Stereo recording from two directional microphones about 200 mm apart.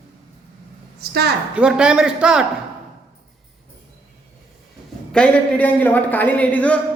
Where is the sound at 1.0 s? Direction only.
55° right (ahead or behind).